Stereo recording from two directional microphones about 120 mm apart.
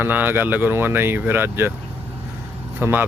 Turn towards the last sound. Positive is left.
turn(degrees=-15)  # may be behind; listen again after turning